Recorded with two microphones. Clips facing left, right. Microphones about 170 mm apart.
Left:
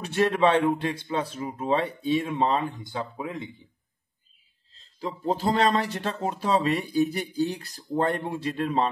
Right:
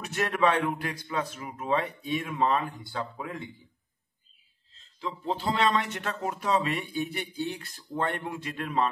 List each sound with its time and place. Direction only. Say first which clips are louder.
0.0 s a man's voice: left 4 dB; 30° left (ahead or behind)
4.7 s speech: left 3 dB; 40° left (ahead or behind)